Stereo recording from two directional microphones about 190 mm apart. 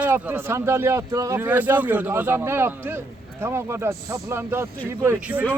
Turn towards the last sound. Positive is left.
turn(degrees=-10)  # may be behind; listen again after turning